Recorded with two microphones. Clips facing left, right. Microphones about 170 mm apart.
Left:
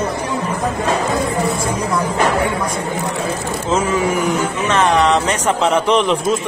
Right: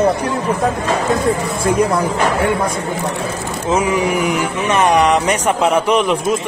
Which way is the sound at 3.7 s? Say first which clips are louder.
Right 1 dB; 15° right (ahead or behind).